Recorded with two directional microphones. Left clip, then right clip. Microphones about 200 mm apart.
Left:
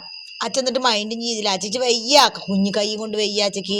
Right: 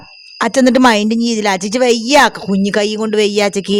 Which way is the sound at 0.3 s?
45° right (ahead or behind).